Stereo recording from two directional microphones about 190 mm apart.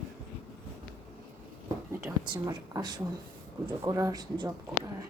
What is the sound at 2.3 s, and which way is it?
A woman's voice, 20° right (ahead or behind).